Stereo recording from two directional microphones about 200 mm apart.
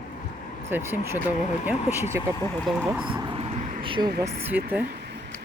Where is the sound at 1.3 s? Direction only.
35° left (ahead or behind).